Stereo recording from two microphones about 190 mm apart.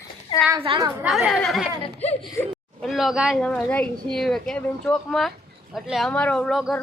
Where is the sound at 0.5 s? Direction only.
25° right (ahead or behind).